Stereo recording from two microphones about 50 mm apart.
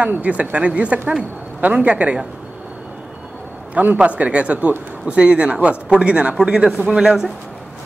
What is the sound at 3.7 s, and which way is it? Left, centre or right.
Speech, right.